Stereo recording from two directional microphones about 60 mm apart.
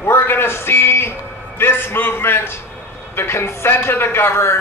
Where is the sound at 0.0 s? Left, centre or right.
Left.